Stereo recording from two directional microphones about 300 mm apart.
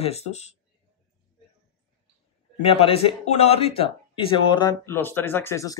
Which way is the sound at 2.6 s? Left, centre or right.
Centre.